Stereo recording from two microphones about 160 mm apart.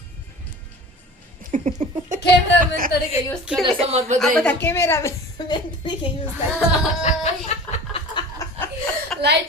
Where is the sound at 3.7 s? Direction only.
40° right (ahead or behind).